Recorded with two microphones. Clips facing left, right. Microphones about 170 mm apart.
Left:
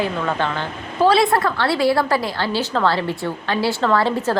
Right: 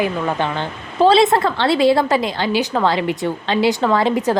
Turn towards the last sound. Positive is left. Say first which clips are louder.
# right 2 dB
turn(degrees=-15)  # may be behind; listen again after turning